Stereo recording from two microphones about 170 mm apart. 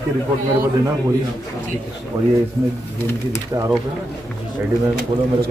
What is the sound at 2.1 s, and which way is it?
Speech, 20° right (ahead or behind).